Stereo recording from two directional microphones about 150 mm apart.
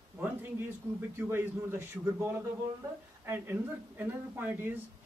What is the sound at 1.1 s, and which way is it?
A man's voice, 15° right (ahead or behind).